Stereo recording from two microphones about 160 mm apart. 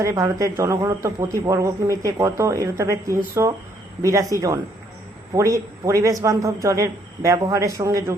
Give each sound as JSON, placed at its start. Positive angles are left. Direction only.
{"t": 0.0, "sound": "speech", "side_deg": -20}